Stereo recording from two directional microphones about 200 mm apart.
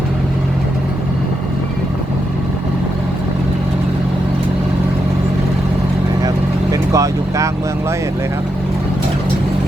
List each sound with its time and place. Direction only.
6.2 s vehicle: 15° right (ahead or behind)